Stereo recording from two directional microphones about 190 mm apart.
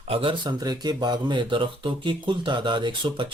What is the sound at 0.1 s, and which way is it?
Speech, 30° right (ahead or behind).